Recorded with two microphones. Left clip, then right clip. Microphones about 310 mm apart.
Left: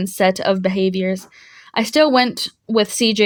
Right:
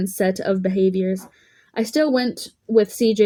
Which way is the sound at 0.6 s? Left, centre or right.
Left.